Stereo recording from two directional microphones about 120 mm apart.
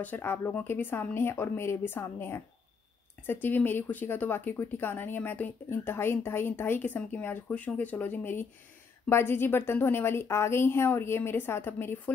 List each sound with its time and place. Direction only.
0.0 s a woman's voice: 15° left (ahead or behind)